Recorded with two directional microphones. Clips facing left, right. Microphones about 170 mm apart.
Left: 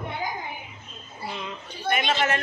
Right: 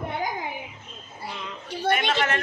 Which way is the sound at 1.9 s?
90° right.